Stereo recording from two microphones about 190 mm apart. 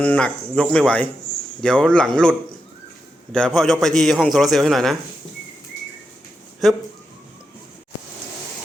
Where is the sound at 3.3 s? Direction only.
5° left (ahead or behind).